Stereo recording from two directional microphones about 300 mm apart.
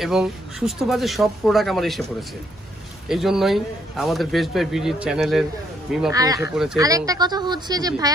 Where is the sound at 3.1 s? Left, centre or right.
Centre.